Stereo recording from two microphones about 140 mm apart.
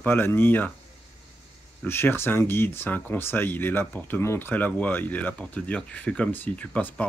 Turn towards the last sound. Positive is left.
turn(degrees=10)  # may be behind; listen again after turning